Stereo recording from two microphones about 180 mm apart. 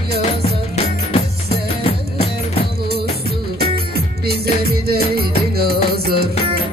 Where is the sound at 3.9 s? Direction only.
60° right (ahead or behind).